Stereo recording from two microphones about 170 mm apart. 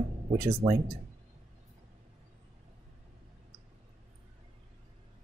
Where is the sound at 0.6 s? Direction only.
25° right (ahead or behind).